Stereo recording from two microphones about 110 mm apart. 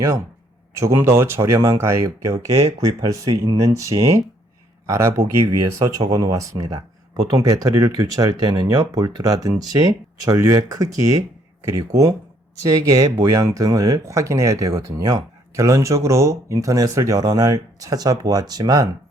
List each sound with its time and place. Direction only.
0.8 s speech: 25° right (ahead or behind)